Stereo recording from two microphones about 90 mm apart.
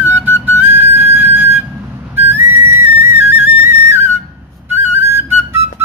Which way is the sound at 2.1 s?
25° right (ahead or behind).